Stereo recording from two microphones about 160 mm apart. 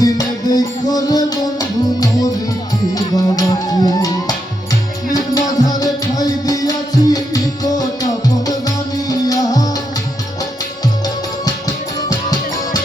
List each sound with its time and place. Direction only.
0.0 s music: 25° left (ahead or behind)
11.9 s music: 25° left (ahead or behind)